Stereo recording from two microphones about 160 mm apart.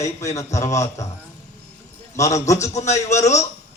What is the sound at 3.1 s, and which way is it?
Speech, 45° left (ahead or behind).